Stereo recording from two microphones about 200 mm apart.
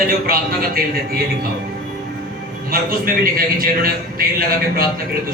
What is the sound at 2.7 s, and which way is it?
A man's voice, 45° right (ahead or behind).